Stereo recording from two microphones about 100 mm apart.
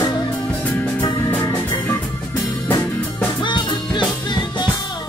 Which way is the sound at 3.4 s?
50° left (ahead or behind).